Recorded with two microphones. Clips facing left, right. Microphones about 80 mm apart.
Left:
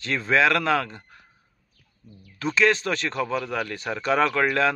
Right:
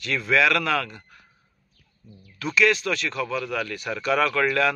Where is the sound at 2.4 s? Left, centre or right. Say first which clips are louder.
Even; left.